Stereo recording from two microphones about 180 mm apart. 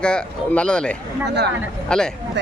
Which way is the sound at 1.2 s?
70° right (ahead or behind).